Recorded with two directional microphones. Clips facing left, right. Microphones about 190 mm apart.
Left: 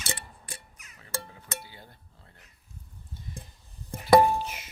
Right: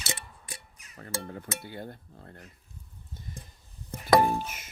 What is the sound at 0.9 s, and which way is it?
Speech, 55° right (ahead or behind).